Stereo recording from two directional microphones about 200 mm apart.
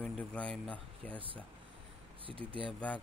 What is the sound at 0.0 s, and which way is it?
Speech, 5° left (ahead or behind).